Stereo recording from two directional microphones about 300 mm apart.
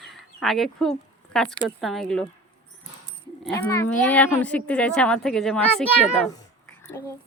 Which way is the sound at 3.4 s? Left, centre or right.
Centre.